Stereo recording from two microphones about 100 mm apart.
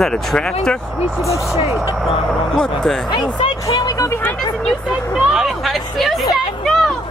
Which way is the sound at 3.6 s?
35° left (ahead or behind).